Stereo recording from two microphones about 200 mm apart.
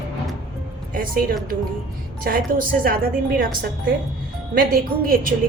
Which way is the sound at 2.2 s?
45° right (ahead or behind).